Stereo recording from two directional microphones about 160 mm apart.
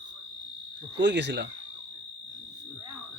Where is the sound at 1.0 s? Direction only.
90° right.